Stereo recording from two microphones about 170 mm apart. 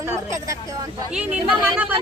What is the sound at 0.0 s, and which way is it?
Speech, 15° right (ahead or behind).